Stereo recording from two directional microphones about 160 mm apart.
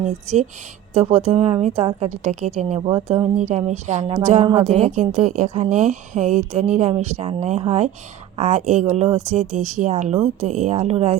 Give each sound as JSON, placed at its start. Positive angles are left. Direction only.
{"t": 0.0, "sound": "a woman's voice", "side_deg": -45}